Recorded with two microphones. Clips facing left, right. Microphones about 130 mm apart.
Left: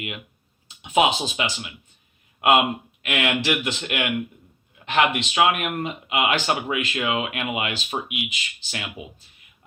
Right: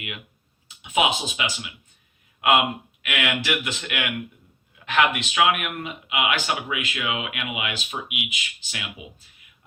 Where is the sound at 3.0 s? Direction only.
35° left (ahead or behind).